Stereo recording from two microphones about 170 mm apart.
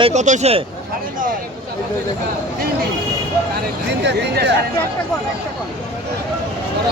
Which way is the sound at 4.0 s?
90° right.